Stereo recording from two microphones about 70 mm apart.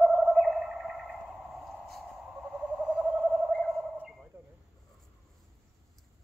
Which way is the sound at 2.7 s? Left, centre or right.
Centre.